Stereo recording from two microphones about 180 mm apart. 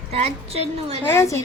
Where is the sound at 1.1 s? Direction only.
15° left (ahead or behind).